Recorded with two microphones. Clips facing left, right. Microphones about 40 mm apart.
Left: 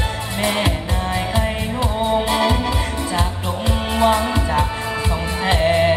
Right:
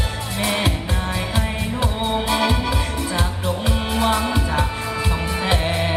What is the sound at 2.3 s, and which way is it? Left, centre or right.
Music, centre.